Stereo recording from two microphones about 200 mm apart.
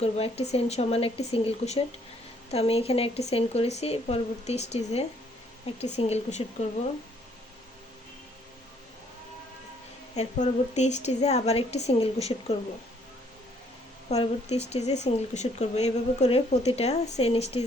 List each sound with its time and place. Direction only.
0.0 s speech: 30° left (ahead or behind)
10.2 s speech: 35° left (ahead or behind)
14.1 s speech: 35° left (ahead or behind)